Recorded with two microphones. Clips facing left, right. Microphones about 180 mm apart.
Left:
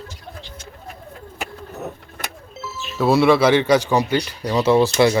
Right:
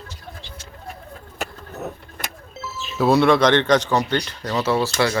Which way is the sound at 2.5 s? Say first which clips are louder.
Even; centre (ahead or behind).